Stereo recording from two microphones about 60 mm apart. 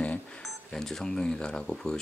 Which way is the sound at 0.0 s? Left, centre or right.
Left.